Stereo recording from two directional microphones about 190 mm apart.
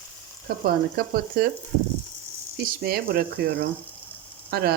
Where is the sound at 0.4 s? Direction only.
55° right (ahead or behind).